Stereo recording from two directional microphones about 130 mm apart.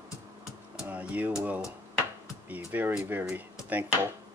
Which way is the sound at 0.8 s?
15° right (ahead or behind).